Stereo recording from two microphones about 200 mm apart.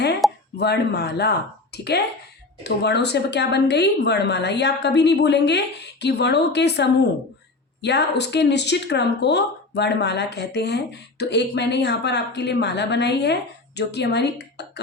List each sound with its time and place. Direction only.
0.5 s speech: 55° left (ahead or behind)